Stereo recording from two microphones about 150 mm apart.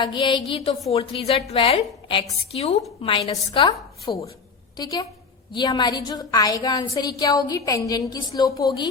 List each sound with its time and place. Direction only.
0.0 s a woman's voice: 30° left (ahead or behind)